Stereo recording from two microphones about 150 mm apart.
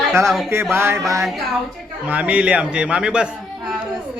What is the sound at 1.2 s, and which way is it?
A man's voice, centre (ahead or behind).